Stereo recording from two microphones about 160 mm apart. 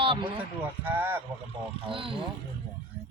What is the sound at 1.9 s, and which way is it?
Speech, 35° right (ahead or behind).